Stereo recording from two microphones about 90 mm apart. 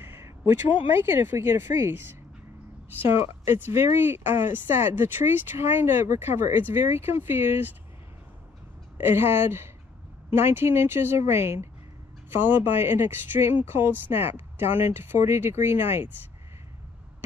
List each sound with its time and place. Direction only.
0.0 s crow: 25° right (ahead or behind)
0.9 s speech: 25° right (ahead or behind)
3.1 s speech: 25° right (ahead or behind)
8.9 s speech: 25° right (ahead or behind)